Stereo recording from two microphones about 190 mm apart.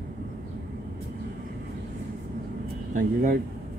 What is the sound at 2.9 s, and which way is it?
Speech, 45° right (ahead or behind).